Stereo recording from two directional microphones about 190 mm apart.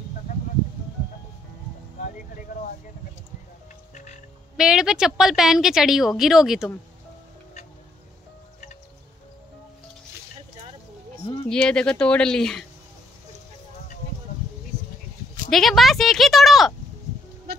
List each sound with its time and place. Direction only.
3.9 s music: 40° left (ahead or behind)
4.6 s a woman's voice: 5° right (ahead or behind)
11.4 s a woman's voice: 5° left (ahead or behind)
15.5 s a woman's voice: centre (ahead or behind)